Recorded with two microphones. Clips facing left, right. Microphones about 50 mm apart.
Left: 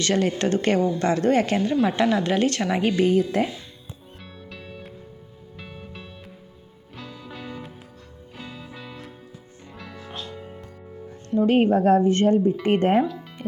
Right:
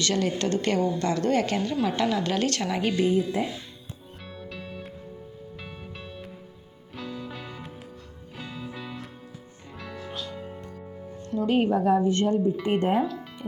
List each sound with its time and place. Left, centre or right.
0.0 s a woman's voice: left
2.9 s a woman's voice: left
4.4 s music: centre
10.1 s music: left
10.3 s music: centre
11.3 s a woman's voice: left
13.0 s speech: centre